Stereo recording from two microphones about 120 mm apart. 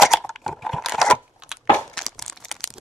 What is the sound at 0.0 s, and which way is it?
Computer keyboard, centre (ahead or behind).